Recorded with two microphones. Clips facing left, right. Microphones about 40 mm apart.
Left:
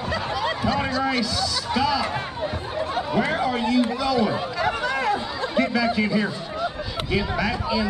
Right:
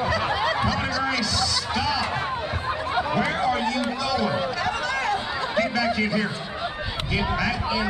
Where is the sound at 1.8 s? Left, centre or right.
Centre.